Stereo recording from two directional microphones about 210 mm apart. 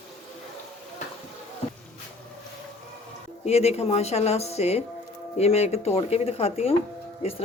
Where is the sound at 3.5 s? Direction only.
30° left (ahead or behind).